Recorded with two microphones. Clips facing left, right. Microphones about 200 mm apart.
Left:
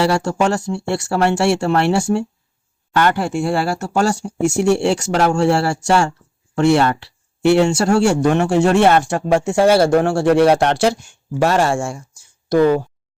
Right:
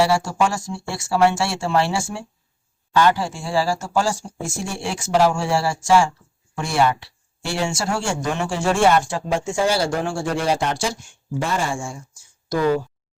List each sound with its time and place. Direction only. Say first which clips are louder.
0.0 s speech: left 2 dB; 65° left (ahead or behind)
12.5 s speech: left 7 dB; 60° left (ahead or behind)